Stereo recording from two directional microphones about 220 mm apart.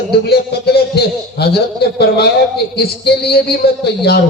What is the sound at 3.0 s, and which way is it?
Speech, 45° left (ahead or behind).